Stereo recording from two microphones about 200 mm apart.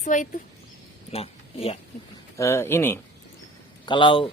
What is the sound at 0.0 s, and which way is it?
Speech, 40° left (ahead or behind).